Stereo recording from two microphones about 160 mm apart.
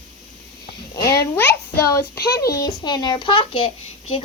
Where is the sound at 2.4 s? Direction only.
20° left (ahead or behind).